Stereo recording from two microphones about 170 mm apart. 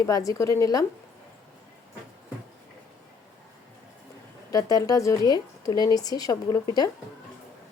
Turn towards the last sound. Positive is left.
turn(degrees=25)  # may be behind; listen again after turning